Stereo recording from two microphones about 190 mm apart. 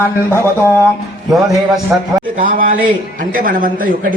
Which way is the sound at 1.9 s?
10° right (ahead or behind).